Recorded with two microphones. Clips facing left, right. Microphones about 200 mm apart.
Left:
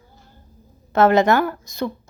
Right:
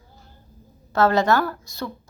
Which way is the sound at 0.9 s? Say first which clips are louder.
Left 3 dB; 20° left (ahead or behind).